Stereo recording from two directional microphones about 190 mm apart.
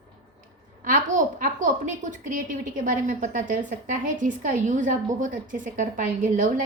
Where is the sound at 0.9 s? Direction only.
45° right (ahead or behind).